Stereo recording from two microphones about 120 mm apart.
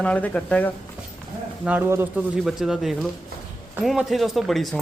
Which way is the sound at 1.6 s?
15° right (ahead or behind).